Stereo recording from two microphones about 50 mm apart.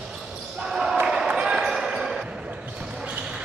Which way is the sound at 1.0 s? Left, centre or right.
Centre.